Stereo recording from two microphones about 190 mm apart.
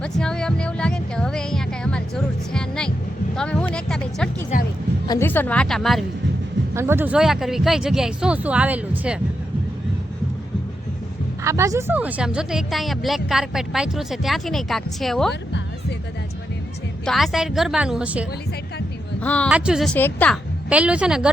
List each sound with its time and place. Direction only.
0.0 s music: 5° left (ahead or behind)
3.3 s speech: 5° left (ahead or behind)
4.5 s a woman's voice: 40° left (ahead or behind)
5.0 s speech: 15° left (ahead or behind)
6.7 s speech: 10° right (ahead or behind)
11.4 s speech: 15° right (ahead or behind); by 15.3 s centre (ahead or behind)
15.3 s music: 65° left (ahead or behind)
17.1 s speech: centre (ahead or behind)
19.2 s speech: 5° left (ahead or behind)
19.5 s speech: 5° right (ahead or behind)
20.7 s speech: 5° right (ahead or behind)